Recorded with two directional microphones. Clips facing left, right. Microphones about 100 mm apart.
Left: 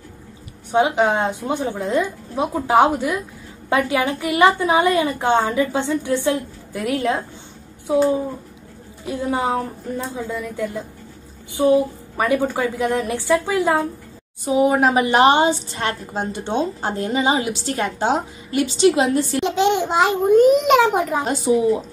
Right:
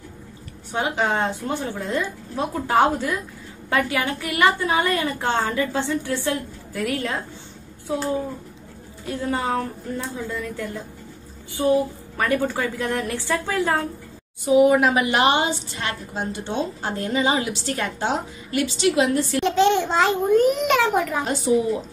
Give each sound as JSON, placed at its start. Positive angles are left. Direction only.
{"t": 0.7, "sound": "a woman's voice", "side_deg": 20}
{"t": 14.4, "sound": "a woman's voice", "side_deg": 30}
{"t": 17.0, "sound": "a woman's voice", "side_deg": 25}